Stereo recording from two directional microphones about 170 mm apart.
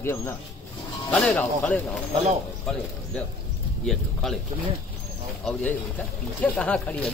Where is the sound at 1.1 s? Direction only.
5° left (ahead or behind).